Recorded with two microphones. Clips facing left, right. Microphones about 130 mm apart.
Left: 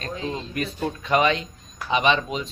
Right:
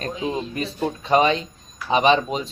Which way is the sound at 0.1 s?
15° right (ahead or behind).